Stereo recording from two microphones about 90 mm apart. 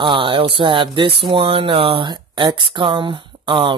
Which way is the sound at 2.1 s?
55° right (ahead or behind).